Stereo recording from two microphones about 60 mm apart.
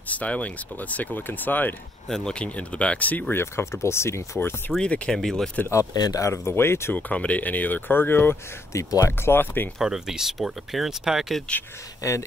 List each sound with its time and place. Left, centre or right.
0.1 s speech: left
2.0 s speech: centre; by 3.3 s left
3.3 s speech: left
4.4 s speech: left
4.7 s speech: centre
5.7 s speech: left
6.3 s speech: left
6.9 s speech: left
8.7 s speech: left
9.2 s speech: left
9.8 s speech: centre
12.0 s speech: left